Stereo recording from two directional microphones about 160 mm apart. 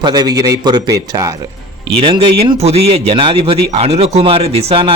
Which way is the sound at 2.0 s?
35° right (ahead or behind).